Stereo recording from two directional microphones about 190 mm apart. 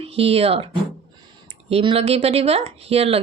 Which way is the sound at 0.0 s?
30° right (ahead or behind).